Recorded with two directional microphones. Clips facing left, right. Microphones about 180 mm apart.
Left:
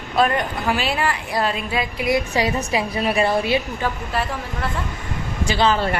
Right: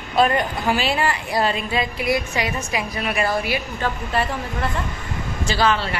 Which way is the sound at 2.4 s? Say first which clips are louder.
Left 4 dB; 35° left (ahead or behind).